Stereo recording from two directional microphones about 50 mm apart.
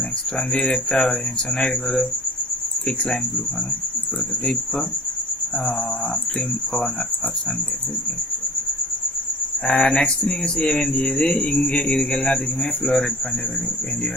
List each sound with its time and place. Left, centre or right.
0.6 s speech: centre
9.6 s speech: centre